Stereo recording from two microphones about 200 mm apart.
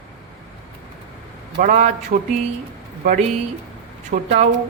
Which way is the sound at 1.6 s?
40° right (ahead or behind).